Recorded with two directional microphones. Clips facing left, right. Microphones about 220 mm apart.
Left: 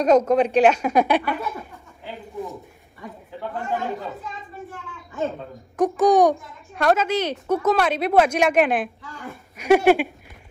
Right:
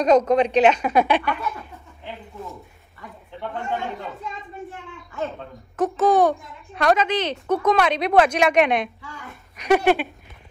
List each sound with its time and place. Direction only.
0.0 s a woman's voice: 10° left (ahead or behind)
3.3 s speech: 5° left (ahead or behind)
5.8 s a woman's voice: 15° left (ahead or behind)